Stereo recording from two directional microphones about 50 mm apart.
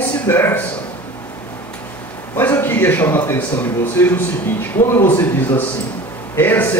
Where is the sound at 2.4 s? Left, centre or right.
Left.